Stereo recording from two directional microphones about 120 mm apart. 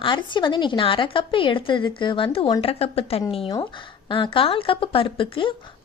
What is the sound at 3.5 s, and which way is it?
Speech, 40° left (ahead or behind).